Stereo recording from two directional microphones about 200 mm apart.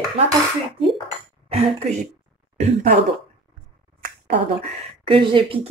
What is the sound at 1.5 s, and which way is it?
Speech, 30° right (ahead or behind).